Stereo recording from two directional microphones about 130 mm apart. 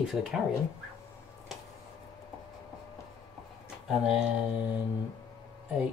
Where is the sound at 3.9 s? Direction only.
5° right (ahead or behind).